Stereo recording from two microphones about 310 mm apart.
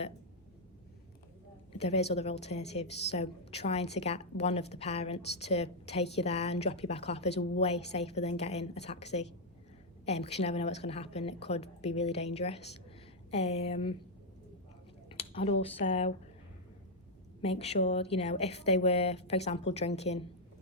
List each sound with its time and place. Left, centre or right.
1.7 s a woman's voice: centre
15.1 s a sound: centre
15.6 s a woman's voice: left
17.4 s a woman's voice: centre